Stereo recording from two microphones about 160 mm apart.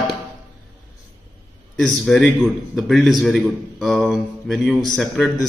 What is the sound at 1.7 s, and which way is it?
A man's voice, centre (ahead or behind).